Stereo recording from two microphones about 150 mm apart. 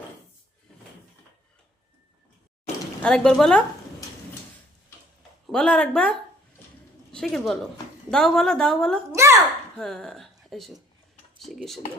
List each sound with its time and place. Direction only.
3.0 s a woman's voice: 5° left (ahead or behind)
5.5 s a woman's voice: 5° left (ahead or behind)
9.1 s a child's voice: 20° right (ahead or behind)
9.7 s a woman's voice: 5° left (ahead or behind)